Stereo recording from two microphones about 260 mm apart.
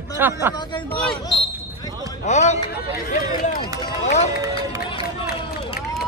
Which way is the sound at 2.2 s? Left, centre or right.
Left.